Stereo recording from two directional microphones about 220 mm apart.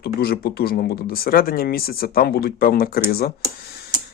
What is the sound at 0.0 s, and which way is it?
Speech, 45° left (ahead or behind).